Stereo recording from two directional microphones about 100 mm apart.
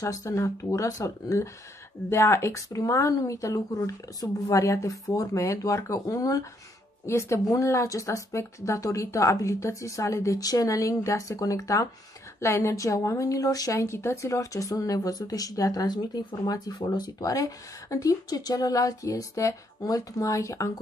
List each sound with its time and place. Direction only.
0.0 s a woman's voice: 30° left (ahead or behind)